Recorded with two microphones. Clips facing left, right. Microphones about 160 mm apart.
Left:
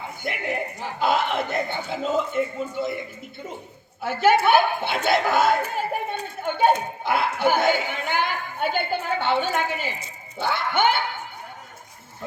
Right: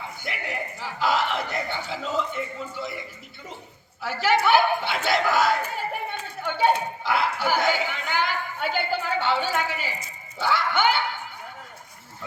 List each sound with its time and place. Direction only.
0.2 s a man's voice: 50° left (ahead or behind)
4.0 s a man's voice: 50° left (ahead or behind)